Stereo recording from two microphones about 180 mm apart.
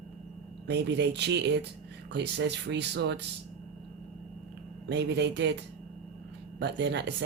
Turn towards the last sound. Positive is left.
turn(degrees=-70)  # may be behind; listen again after turning